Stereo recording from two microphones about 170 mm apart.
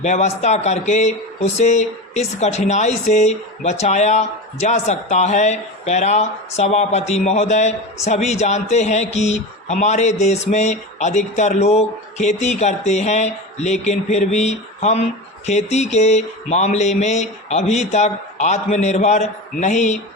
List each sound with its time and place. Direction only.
0.0 s speech: 45° left (ahead or behind)